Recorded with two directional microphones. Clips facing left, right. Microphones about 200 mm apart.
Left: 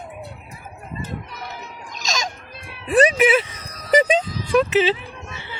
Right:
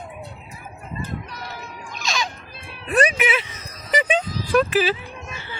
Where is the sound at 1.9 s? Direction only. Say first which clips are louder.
Even; 40° left (ahead or behind).